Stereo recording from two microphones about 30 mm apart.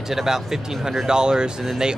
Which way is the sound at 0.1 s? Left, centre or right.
Centre.